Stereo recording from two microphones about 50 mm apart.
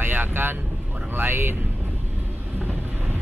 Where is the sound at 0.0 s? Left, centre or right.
Right.